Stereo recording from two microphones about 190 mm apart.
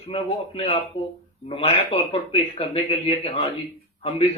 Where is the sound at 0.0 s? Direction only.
30° left (ahead or behind).